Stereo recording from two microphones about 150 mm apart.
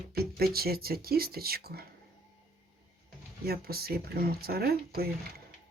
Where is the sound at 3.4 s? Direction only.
90° right.